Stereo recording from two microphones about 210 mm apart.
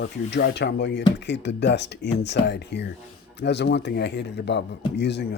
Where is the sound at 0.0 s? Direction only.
55° left (ahead or behind).